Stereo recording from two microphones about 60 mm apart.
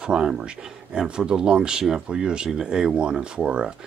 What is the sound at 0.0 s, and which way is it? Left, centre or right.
Speech, centre.